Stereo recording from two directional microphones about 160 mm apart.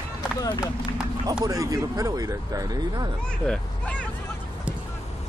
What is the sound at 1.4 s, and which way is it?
Speech, 20° right (ahead or behind).